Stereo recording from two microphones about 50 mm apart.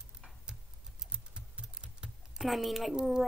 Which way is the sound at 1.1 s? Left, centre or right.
Right.